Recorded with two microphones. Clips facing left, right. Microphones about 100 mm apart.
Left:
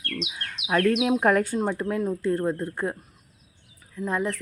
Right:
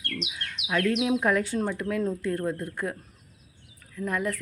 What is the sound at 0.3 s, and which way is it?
Speech, 40° left (ahead or behind).